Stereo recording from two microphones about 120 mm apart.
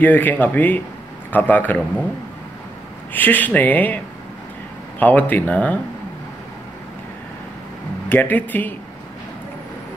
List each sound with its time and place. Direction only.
0.0 s speech: 15° left (ahead or behind)
3.1 s speech: 15° left (ahead or behind)
8.1 s speech: 15° left (ahead or behind)